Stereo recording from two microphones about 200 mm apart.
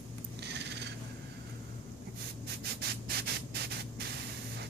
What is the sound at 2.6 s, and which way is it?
Rub, 55° right (ahead or behind).